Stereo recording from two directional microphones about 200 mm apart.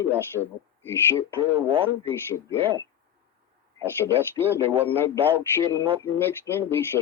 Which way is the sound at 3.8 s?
10° left (ahead or behind).